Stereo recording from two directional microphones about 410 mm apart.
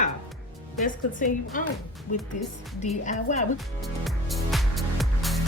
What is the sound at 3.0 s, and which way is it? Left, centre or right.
Speech, centre.